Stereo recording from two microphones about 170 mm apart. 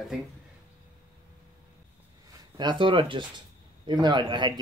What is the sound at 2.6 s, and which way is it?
Speech, 30° right (ahead or behind).